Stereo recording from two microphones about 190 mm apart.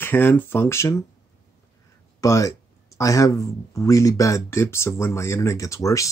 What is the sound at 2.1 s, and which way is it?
Speech, 15° left (ahead or behind).